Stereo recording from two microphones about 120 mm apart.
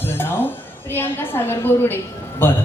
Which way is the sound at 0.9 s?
20° left (ahead or behind).